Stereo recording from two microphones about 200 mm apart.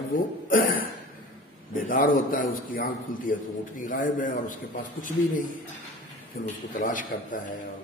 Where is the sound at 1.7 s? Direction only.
45° left (ahead or behind).